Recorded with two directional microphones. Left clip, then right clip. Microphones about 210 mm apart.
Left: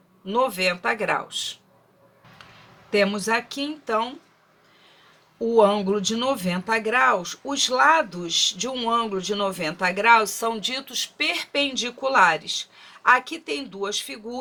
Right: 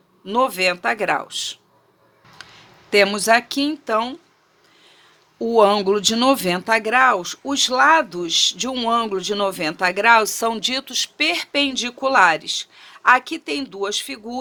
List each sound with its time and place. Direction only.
0.3 s speech: 50° right (ahead or behind)
2.9 s speech: 50° right (ahead or behind)
5.5 s speech: 50° right (ahead or behind)